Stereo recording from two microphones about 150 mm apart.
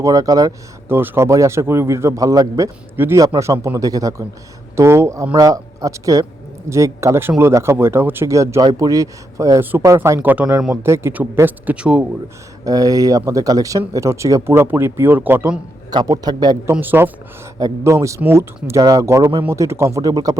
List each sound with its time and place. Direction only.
0.0 s speech: 25° right (ahead or behind)
5.2 s speech: 30° right (ahead or behind); by 12.0 s 10° right (ahead or behind)
12.6 s speech: 25° right (ahead or behind)
15.9 s speech: 25° right (ahead or behind)
16.7 s speech: 15° right (ahead or behind)